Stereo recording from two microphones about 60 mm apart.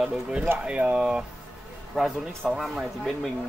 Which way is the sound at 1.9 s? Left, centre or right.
Centre.